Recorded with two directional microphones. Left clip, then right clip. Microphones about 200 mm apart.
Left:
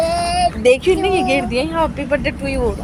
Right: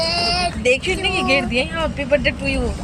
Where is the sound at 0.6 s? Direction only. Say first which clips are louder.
Left 6 dB; 50° left (ahead or behind).